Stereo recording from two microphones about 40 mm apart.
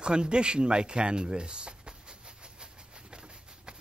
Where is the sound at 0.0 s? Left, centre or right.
Right.